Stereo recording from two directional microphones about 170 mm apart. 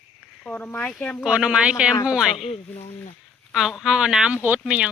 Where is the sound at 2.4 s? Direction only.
35° left (ahead or behind).